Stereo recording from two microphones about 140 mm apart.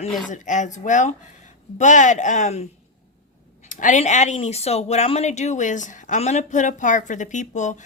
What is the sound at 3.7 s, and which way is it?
A woman's voice, 65° left (ahead or behind).